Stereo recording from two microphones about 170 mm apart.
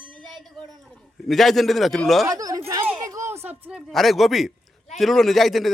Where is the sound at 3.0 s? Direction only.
20° right (ahead or behind).